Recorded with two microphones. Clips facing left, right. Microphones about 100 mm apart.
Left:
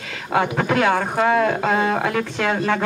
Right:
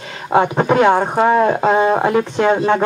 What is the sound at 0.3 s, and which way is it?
Speech, 25° right (ahead or behind).